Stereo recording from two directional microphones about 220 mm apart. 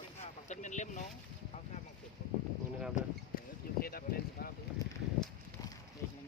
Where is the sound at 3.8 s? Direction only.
40° left (ahead or behind).